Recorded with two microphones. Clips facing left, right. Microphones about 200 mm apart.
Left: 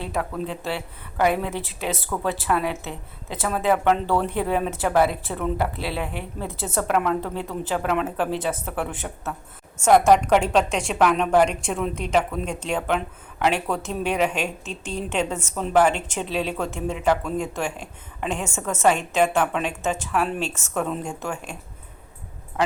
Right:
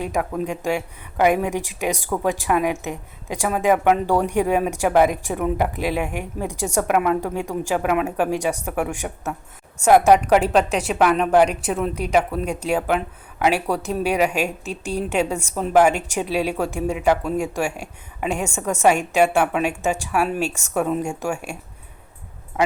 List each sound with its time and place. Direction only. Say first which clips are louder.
0.0 s a woman's voice: right 4 dB; 15° right (ahead or behind)